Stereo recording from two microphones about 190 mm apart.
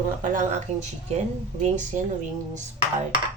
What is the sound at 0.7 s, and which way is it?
Speech, 35° right (ahead or behind).